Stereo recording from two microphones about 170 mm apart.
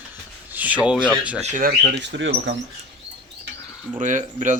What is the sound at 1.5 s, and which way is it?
Speech, 55° right (ahead or behind).